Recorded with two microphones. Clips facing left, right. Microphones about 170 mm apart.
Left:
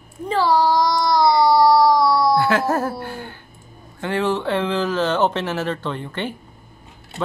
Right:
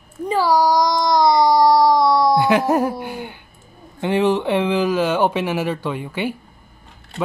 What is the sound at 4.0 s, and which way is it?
Speech, 15° right (ahead or behind).